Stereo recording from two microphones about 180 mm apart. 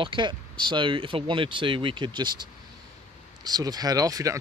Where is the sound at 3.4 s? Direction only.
20° right (ahead or behind).